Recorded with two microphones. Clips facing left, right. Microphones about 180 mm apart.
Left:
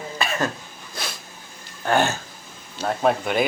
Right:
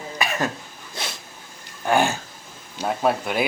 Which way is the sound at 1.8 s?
15° right (ahead or behind).